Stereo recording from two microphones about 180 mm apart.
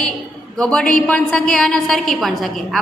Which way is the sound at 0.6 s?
5° left (ahead or behind).